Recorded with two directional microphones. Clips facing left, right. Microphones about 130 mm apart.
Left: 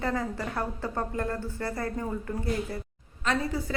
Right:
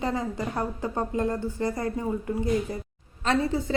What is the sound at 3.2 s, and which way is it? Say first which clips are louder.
Speech: right 4 dB; 25° right (ahead or behind).